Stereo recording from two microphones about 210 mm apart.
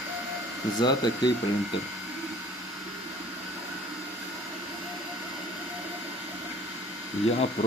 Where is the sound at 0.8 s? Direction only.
20° left (ahead or behind).